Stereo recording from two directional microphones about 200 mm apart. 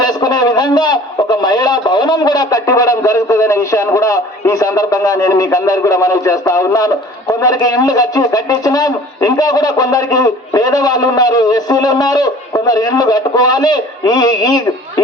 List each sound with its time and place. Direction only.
0.0 s a man's voice: 20° left (ahead or behind)